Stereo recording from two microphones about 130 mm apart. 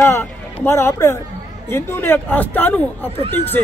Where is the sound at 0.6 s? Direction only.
20° left (ahead or behind).